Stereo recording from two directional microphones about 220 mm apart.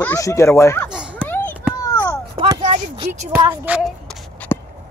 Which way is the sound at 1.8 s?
15° left (ahead or behind).